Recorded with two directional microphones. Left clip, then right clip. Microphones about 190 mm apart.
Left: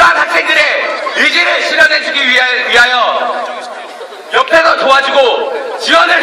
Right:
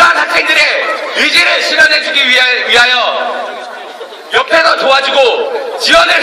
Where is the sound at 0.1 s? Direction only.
30° right (ahead or behind).